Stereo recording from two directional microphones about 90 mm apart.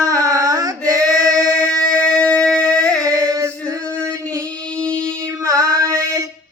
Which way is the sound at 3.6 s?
35° right (ahead or behind).